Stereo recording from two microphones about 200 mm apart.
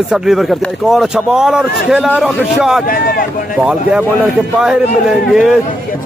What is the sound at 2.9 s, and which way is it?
Speech, 45° left (ahead or behind).